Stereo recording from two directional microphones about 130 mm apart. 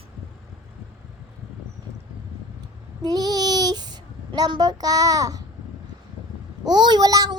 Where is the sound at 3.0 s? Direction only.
30° right (ahead or behind).